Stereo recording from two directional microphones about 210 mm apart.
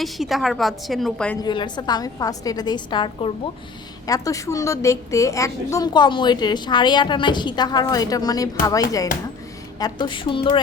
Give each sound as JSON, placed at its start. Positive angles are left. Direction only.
{"t": 0.0, "sound": "a woman's voice", "side_deg": 0}
{"t": 1.4, "sound": "a woman's voice", "side_deg": 20}